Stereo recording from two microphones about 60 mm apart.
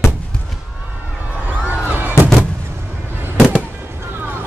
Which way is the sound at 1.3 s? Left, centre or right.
Right.